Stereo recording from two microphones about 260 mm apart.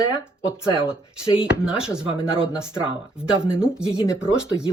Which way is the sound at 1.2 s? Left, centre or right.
Left.